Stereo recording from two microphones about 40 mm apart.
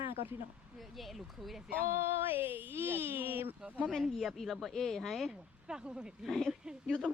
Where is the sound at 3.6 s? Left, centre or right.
Right.